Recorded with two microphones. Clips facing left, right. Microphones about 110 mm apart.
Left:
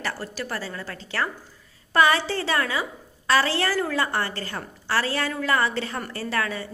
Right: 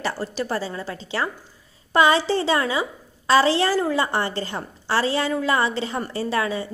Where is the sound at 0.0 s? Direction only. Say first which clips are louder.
Right 5 dB; 25° right (ahead or behind).